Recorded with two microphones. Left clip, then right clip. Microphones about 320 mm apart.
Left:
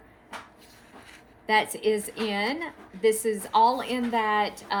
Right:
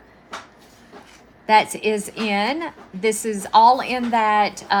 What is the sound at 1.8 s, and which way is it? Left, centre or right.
A woman's voice, right.